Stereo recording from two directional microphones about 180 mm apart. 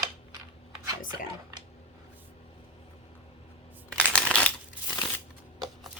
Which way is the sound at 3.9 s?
5° left (ahead or behind).